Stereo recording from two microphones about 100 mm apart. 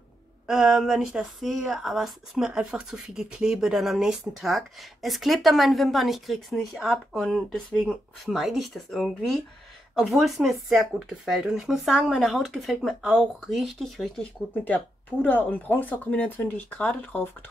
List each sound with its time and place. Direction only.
0.5 s speech: 5° right (ahead or behind)
15.2 s speech: 15° left (ahead or behind)